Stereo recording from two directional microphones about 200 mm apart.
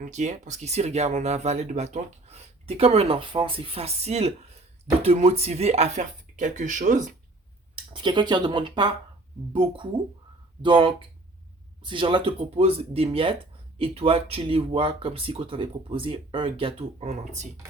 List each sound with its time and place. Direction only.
0.0 s speech: 35° right (ahead or behind)
7.9 s speech: 25° right (ahead or behind)